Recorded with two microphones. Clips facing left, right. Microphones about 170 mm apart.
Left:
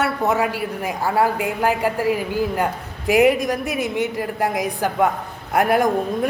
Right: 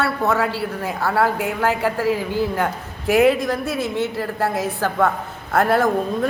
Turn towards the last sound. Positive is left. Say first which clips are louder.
# even
turn(degrees=15)  # may be behind; listen again after turning